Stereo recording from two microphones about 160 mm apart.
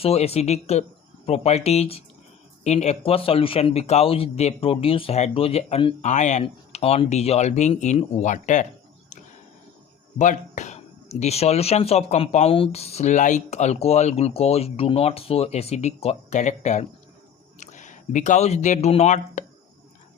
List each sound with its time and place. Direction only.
0.0 s speech: 40° left (ahead or behind)
10.2 s speech: 50° left (ahead or behind)